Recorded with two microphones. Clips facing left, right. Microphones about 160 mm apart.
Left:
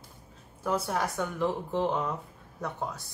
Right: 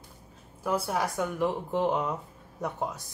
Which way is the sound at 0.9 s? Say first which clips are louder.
Right 1 dB; 10° right (ahead or behind).